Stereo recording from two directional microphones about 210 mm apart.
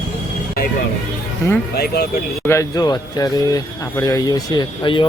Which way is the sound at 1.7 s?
50° left (ahead or behind).